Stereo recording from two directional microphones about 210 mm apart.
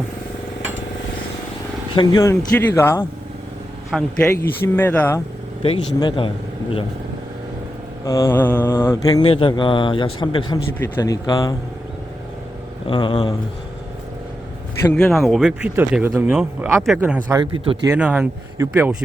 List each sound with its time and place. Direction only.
2.0 s mantra: 20° left (ahead or behind)
2.3 s speech: 10° left (ahead or behind)
5.6 s mantra: 25° left (ahead or behind)
8.0 s mantra: 15° left (ahead or behind)
10.8 s speech: 15° left (ahead or behind)
12.9 s mantra: 25° left (ahead or behind)
14.8 s speech: 5° left (ahead or behind)
17.4 s speech: 25° right (ahead or behind)
17.9 s speech: 5° right (ahead or behind)